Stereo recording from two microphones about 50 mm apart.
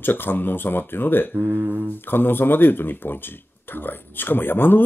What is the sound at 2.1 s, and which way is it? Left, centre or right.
Speech, left.